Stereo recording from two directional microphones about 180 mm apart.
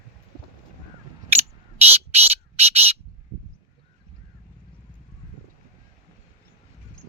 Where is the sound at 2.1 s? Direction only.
35° right (ahead or behind).